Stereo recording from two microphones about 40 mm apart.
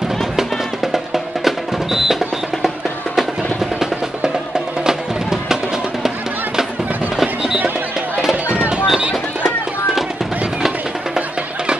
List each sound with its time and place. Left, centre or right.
0.9 s music: centre
4.8 s music: centre
8.5 s music: right